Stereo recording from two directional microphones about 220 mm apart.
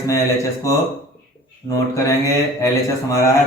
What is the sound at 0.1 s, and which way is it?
Speech, 15° left (ahead or behind).